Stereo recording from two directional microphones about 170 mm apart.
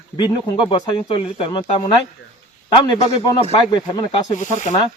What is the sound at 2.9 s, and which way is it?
Speech, 25° left (ahead or behind).